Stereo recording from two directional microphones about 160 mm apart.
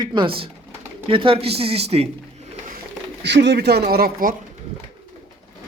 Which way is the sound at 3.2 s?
90° right.